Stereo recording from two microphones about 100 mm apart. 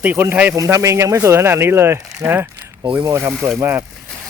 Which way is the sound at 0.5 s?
30° right (ahead or behind).